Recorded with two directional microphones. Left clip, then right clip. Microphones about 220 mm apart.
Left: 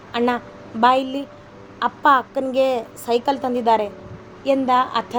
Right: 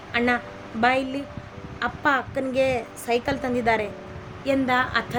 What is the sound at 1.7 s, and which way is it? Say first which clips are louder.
Speech: left 7 dB; 15° right (ahead or behind).